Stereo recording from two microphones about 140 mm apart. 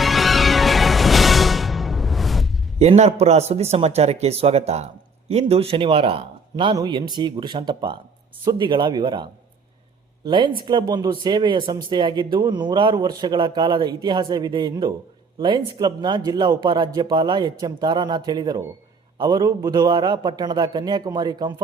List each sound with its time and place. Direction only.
0.0 s music: centre (ahead or behind)
2.7 s speech: 50° right (ahead or behind); by 9.2 s 30° right (ahead or behind)
10.2 s a man's voice: 35° right (ahead or behind)